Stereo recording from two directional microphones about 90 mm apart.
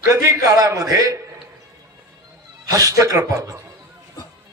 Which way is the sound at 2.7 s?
40° right (ahead or behind).